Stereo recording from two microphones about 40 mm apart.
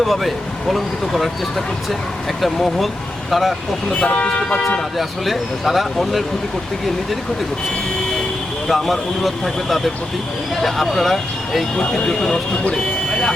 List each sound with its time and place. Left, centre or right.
0.0 s speech: centre
4.0 s speech: left
4.9 s speech: centre
8.6 s speech: centre
11.8 s speech: left